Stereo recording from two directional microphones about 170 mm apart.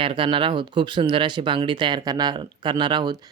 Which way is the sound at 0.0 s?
30° right (ahead or behind).